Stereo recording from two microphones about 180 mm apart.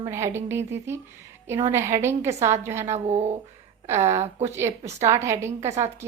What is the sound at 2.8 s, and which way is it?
Speech, 40° right (ahead or behind).